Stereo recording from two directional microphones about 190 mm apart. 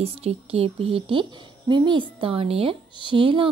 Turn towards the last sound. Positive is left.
turn(degrees=-25)  # may be behind; listen again after turning